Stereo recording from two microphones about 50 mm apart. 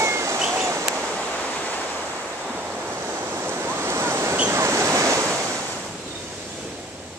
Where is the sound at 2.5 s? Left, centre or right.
Right.